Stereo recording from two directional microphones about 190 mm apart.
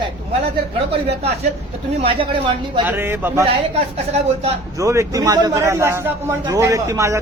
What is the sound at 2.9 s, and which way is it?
Speech, 10° right (ahead or behind).